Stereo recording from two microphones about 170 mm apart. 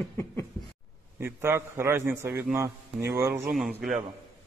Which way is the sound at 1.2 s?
15° right (ahead or behind).